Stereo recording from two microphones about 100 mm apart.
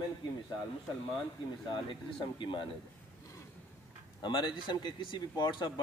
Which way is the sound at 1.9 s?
55° left (ahead or behind).